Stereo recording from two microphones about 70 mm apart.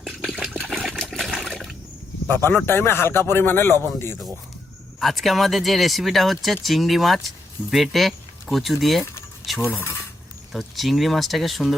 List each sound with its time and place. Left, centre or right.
0.0 s a sound: centre
0.7 s trickle: centre
2.2 s a man's voice: left
4.9 s speech: centre
10.5 s speech: centre